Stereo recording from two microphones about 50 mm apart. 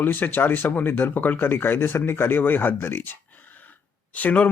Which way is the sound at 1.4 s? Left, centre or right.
Left.